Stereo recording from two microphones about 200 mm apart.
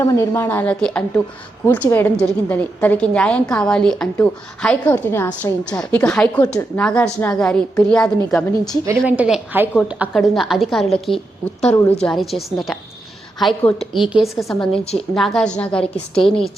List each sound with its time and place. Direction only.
0.0 s a woman's voice: 15° left (ahead or behind)